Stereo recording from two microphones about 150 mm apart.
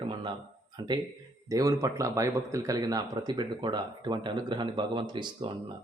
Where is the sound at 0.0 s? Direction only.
35° right (ahead or behind).